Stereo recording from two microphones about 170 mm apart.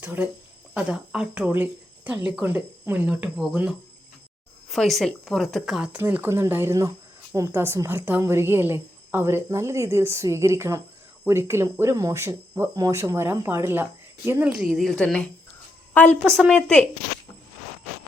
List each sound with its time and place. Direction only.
0.0 s a woman's voice: 10° right (ahead or behind); by 16.8 s 5° left (ahead or behind)